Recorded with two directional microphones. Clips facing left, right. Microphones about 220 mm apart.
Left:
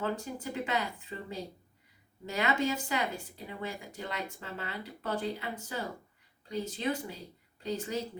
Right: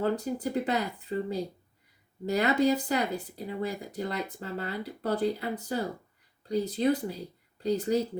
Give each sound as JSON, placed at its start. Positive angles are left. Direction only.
{"t": 0.0, "sound": "speech", "side_deg": -35}